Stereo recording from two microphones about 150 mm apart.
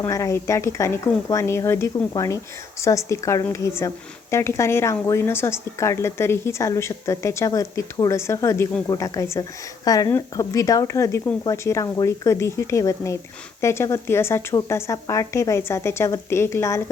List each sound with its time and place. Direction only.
0.0 s a woman's voice: 20° left (ahead or behind)